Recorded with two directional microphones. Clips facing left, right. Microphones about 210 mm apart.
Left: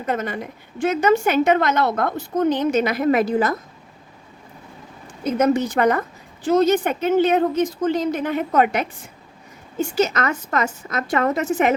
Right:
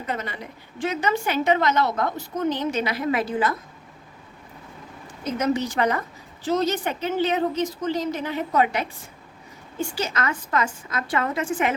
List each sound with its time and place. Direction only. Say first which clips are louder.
0.0 s a woman's voice: left 6 dB; 50° left (ahead or behind)
5.2 s a woman's voice: left 5 dB; 50° left (ahead or behind)
10.8 s a woman's voice: left 5 dB; 45° left (ahead or behind)